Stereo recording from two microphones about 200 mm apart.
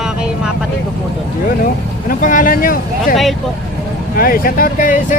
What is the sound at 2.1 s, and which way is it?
Speech, 40° left (ahead or behind).